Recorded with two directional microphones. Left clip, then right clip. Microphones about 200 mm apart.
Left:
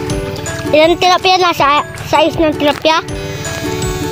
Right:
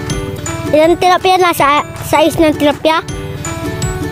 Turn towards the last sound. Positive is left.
turn(degrees=-15)  # may be behind; listen again after turning